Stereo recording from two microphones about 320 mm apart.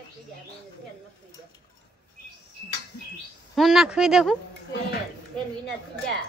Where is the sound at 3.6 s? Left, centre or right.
Centre.